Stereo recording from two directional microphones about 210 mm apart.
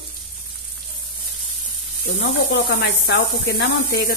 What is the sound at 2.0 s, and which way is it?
Speech, 55° left (ahead or behind).